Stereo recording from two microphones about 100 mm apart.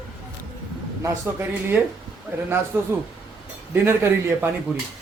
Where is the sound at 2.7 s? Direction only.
15° right (ahead or behind).